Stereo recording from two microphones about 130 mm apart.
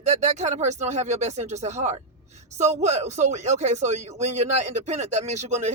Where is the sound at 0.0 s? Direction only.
65° right (ahead or behind).